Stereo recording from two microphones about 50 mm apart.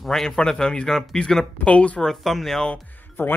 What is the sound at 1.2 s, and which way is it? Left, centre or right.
Speech, left.